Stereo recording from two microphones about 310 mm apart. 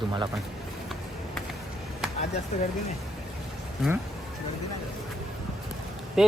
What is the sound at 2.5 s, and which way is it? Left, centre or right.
Speech, left.